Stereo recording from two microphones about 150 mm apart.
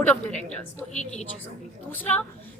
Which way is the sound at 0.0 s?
10° left (ahead or behind).